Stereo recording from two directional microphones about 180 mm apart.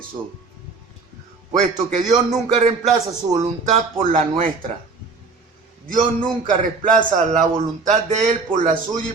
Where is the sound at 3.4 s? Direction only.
40° right (ahead or behind).